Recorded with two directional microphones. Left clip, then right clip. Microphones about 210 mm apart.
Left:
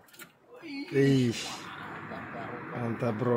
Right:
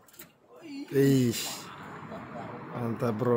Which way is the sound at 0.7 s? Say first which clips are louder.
Right 1 dB; 10° right (ahead or behind).